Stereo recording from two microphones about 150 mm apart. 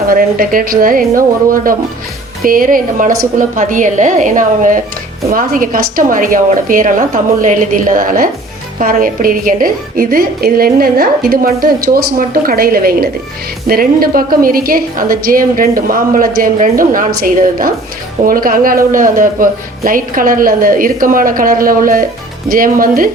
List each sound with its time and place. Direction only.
0.1 s a woman's voice: 70° right (ahead or behind)